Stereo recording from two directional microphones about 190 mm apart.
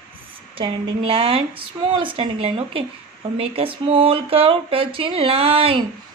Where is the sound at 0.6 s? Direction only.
30° right (ahead or behind).